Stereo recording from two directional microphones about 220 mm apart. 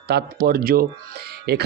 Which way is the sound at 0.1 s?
45° right (ahead or behind).